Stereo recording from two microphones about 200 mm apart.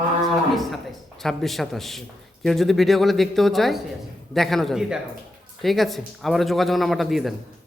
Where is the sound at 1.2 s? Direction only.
Centre (ahead or behind).